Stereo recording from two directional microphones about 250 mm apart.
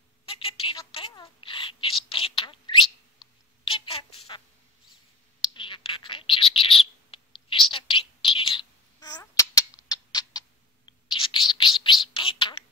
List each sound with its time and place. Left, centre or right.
0.2 s telephone: left
3.6 s cat: left
5.4 s bird: centre
7.1 s whispering: left
10.9 s a sound: centre